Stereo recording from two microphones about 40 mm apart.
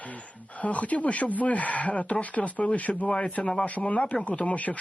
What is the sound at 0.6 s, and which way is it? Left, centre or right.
Speech, left.